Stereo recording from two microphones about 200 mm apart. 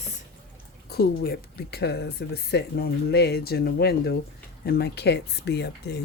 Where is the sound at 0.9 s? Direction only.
50° left (ahead or behind).